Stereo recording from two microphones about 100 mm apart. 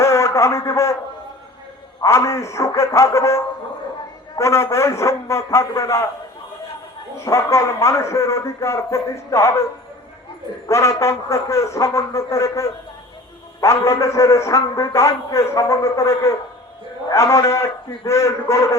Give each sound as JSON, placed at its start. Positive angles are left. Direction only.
{"t": 0.0, "sound": "a sound", "side_deg": 30}
{"t": 2.0, "sound": "a man's voice", "side_deg": 30}
{"t": 7.3, "sound": "a man's voice", "side_deg": 30}
{"t": 10.7, "sound": "a man's voice", "side_deg": 30}